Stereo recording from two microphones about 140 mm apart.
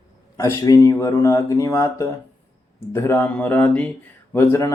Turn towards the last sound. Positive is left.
turn(degrees=20)  # may be behind; listen again after turning